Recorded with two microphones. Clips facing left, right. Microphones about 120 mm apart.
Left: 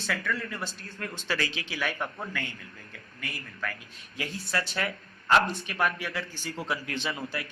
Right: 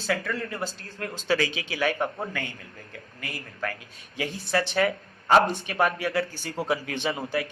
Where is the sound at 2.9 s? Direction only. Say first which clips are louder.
Right 2 dB; 30° right (ahead or behind).